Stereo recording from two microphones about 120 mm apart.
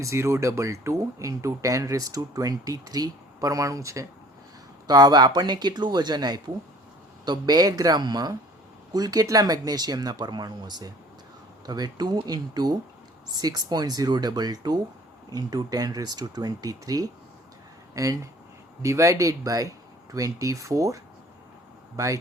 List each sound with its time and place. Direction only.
0.0 s speech: 25° right (ahead or behind)